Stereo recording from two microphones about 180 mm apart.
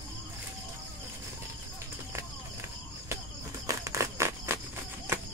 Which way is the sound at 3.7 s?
15° right (ahead or behind).